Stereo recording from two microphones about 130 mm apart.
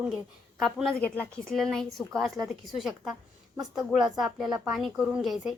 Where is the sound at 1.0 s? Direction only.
10° left (ahead or behind).